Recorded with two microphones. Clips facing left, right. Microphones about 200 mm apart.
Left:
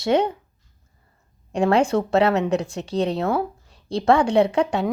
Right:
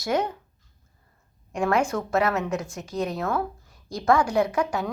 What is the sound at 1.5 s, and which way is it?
A woman's voice, 30° left (ahead or behind).